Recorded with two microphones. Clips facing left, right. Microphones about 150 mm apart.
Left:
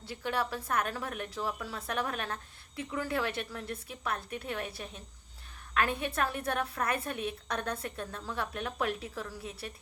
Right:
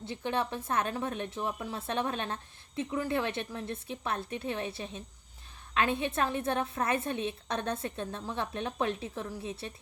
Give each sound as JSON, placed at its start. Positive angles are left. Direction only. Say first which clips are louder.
{"t": 0.0, "sound": "a woman's voice", "louder": "right 1 dB", "side_deg": -20}